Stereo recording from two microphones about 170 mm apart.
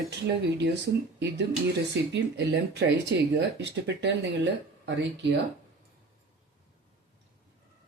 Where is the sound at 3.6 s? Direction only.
90° right.